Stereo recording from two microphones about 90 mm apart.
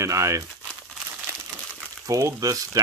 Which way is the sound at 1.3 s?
25° right (ahead or behind).